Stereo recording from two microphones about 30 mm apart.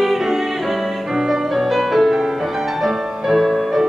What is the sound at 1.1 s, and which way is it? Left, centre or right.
Music, centre.